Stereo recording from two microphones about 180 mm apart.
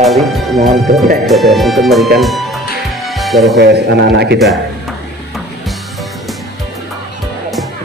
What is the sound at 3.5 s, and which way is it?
Speech, 65° right (ahead or behind).